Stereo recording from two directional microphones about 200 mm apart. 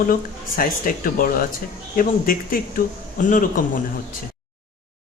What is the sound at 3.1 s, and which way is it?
Speech, 45° left (ahead or behind).